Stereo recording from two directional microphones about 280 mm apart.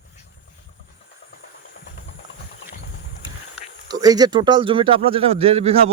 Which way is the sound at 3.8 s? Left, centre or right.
Centre.